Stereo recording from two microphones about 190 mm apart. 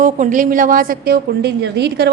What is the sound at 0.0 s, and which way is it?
A woman's voice, 40° right (ahead or behind).